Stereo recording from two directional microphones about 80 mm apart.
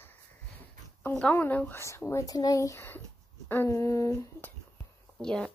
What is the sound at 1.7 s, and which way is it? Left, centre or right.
Speech, left.